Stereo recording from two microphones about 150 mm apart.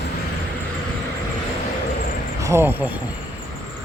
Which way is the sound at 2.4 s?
20° right (ahead or behind).